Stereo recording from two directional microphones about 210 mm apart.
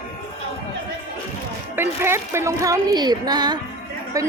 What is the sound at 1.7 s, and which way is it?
Speech, 10° right (ahead or behind).